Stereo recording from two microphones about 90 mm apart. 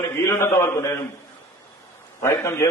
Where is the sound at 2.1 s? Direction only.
30° left (ahead or behind).